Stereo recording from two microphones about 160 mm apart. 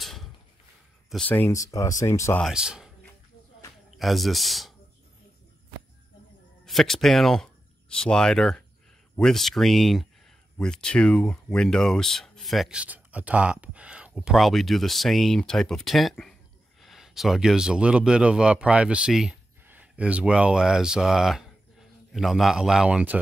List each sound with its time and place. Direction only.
0.0 s a sound: centre (ahead or behind)
1.1 s speech: 10° left (ahead or behind)
2.4 s speech: 5° right (ahead or behind)
3.9 s speech: centre (ahead or behind)
6.6 s speech: centre (ahead or behind)